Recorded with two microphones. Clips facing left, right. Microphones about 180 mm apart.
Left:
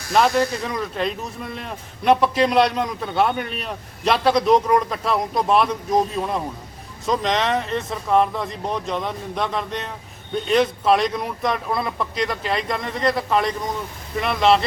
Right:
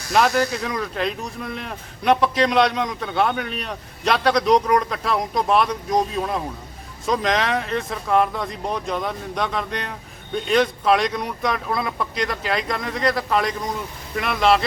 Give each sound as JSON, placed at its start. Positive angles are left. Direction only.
{"t": 0.1, "sound": "speech", "side_deg": 0}